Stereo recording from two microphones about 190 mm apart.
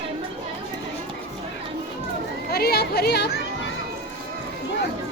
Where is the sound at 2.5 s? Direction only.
55° left (ahead or behind).